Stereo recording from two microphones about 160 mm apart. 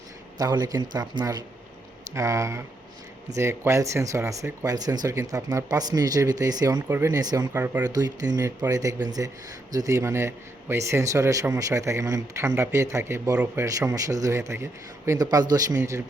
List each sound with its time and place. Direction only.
0.3 s speech: 25° right (ahead or behind)
7.9 s a man's voice: 25° right (ahead or behind)